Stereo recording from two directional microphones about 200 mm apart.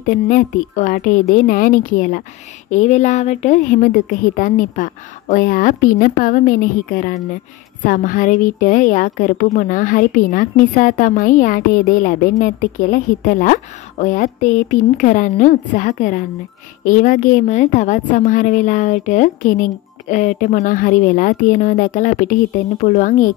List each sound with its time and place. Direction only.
0.0 s a woman's voice: 40° left (ahead or behind)